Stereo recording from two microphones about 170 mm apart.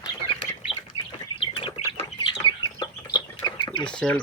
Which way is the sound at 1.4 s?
30° left (ahead or behind).